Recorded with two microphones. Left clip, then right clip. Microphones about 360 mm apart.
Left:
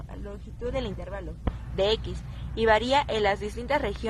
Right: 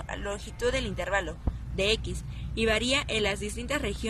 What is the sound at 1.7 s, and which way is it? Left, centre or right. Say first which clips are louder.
Speech: left 2 dB; centre.